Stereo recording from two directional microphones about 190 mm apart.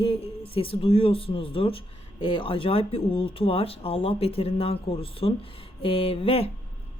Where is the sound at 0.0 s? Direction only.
30° left (ahead or behind).